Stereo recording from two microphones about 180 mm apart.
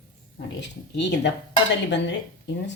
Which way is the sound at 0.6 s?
75° left (ahead or behind).